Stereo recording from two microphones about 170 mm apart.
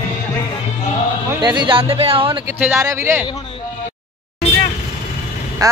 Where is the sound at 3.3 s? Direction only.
30° left (ahead or behind).